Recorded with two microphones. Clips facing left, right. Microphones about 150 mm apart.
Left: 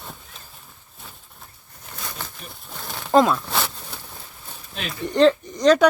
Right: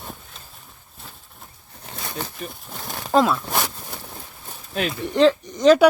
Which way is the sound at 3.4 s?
15° right (ahead or behind).